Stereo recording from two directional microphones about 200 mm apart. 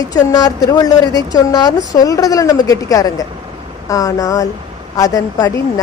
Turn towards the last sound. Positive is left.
turn(degrees=20)  # may be behind; listen again after turning